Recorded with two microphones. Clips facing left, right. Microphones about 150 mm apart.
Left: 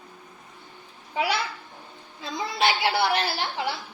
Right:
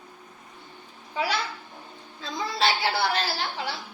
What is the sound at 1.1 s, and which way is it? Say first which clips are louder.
A child's voice: left 2 dB; 20° left (ahead or behind).